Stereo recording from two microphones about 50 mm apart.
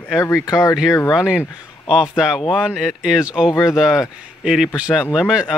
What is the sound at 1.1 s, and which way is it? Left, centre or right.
A man's voice, centre.